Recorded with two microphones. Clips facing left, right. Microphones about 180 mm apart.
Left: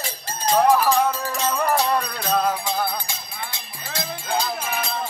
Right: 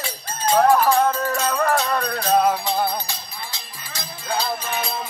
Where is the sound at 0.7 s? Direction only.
10° left (ahead or behind).